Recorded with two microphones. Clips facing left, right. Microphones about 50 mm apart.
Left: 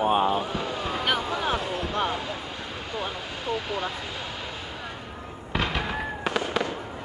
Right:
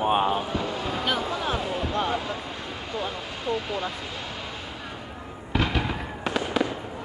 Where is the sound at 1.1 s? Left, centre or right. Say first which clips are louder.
Left 1 dB; left.